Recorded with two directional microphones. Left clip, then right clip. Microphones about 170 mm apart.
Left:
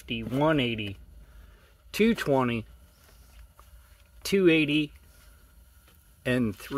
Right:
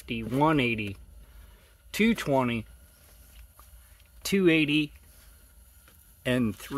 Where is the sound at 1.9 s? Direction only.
5° left (ahead or behind).